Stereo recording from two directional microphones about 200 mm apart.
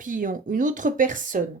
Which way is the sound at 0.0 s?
40° right (ahead or behind).